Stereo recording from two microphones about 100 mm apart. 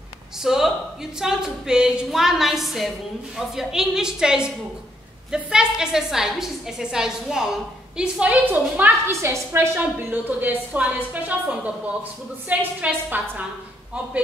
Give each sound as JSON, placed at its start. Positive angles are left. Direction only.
{"t": 0.4, "sound": "a woman's voice", "side_deg": -5}